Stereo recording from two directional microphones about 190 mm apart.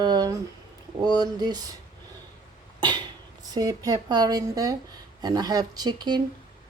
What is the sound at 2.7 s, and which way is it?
Cough, 25° right (ahead or behind).